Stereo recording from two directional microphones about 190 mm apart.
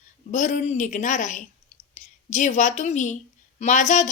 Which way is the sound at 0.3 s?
40° left (ahead or behind).